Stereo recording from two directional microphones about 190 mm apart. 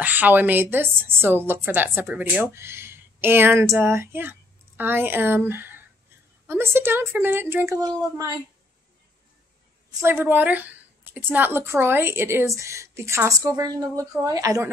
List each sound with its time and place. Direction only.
0.0 s a woman's voice: 10° right (ahead or behind)
9.8 s a woman's voice: 15° right (ahead or behind)